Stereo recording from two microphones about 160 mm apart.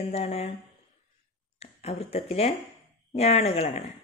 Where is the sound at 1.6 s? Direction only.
40° left (ahead or behind).